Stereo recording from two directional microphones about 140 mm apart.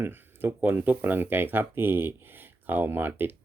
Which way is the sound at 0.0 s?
15° right (ahead or behind).